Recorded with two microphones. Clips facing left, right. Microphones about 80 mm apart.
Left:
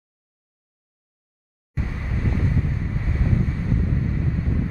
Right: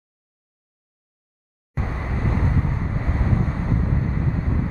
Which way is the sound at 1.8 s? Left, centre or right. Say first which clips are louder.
Right 2 dB; right.